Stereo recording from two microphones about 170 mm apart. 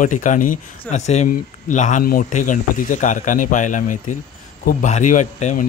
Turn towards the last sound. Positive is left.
turn(degrees=45)  # may be behind; listen again after turning